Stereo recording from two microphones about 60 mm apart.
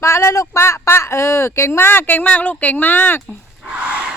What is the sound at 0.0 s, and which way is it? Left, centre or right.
Speech, left.